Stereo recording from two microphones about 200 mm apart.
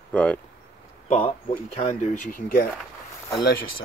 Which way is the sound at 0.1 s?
5° left (ahead or behind).